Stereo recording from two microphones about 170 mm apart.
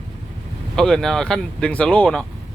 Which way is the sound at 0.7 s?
5° left (ahead or behind).